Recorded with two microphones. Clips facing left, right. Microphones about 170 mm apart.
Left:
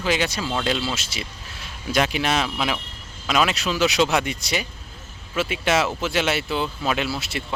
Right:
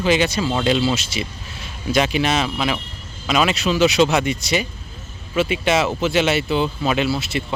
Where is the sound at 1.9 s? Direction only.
5° left (ahead or behind).